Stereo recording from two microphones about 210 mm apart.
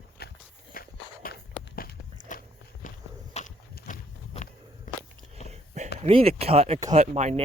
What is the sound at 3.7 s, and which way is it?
Walk, 45° left (ahead or behind).